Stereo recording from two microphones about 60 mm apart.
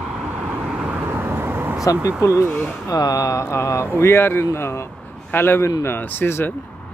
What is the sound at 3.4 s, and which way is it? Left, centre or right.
Speech, left.